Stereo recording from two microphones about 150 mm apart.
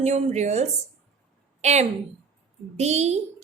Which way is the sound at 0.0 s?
50° right (ahead or behind).